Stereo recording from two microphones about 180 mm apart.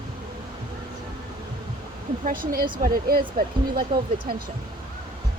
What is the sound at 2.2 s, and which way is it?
Speech, 50° right (ahead or behind).